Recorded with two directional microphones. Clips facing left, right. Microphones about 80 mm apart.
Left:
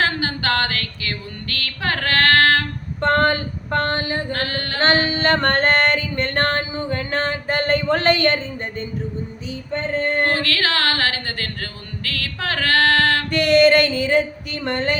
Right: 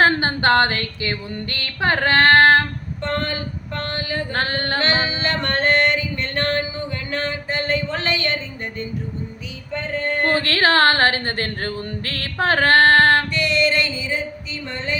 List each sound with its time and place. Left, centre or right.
0.0 s a sound: right
3.0 s music: left
4.3 s speech: right
5.0 s music: left
9.7 s music: left
10.2 s speech: right
13.3 s a sound: left